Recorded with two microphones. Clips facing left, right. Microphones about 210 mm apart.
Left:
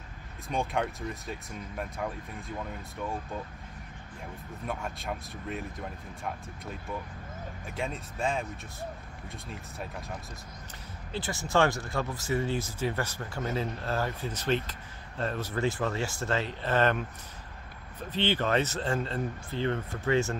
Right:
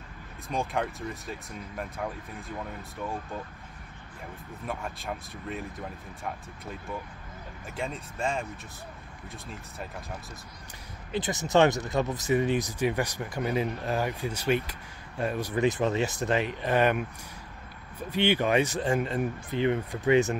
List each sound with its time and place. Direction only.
0.5 s speech: centre (ahead or behind)
4.6 s speech: centre (ahead or behind)
7.6 s speech: centre (ahead or behind)
11.1 s speech: 20° right (ahead or behind)
18.1 s speech: 15° right (ahead or behind)